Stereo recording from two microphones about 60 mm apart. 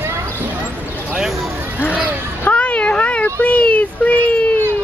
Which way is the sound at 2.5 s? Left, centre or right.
Left.